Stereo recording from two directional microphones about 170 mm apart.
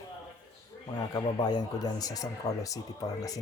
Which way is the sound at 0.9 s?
25° left (ahead or behind).